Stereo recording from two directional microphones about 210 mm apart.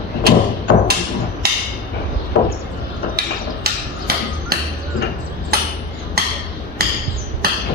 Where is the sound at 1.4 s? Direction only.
50° right (ahead or behind).